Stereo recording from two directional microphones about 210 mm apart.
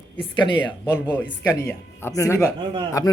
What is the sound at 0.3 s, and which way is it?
Speech, 25° left (ahead or behind).